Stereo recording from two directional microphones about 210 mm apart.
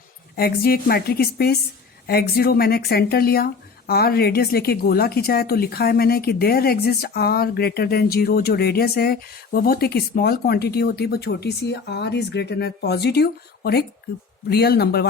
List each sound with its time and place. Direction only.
0.3 s speech: 45° left (ahead or behind)